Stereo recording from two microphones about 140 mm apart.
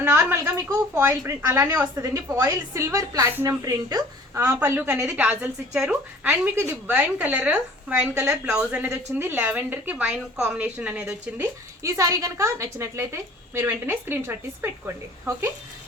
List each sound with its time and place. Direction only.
0.5 s a woman's voice: 20° right (ahead or behind)